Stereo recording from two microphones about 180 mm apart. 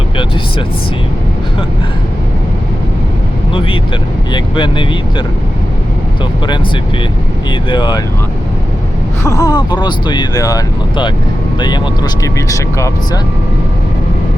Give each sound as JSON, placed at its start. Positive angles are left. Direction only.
{"t": 4.3, "sound": "speech", "side_deg": 25}
{"t": 7.7, "sound": "speech", "side_deg": 25}
{"t": 9.2, "sound": "speech", "side_deg": 20}
{"t": 12.2, "sound": "speech", "side_deg": 20}